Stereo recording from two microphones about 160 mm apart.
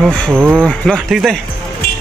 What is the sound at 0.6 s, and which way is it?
Speech, 5° left (ahead or behind).